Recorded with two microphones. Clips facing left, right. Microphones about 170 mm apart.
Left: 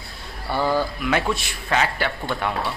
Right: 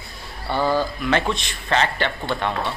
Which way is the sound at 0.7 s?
5° left (ahead or behind).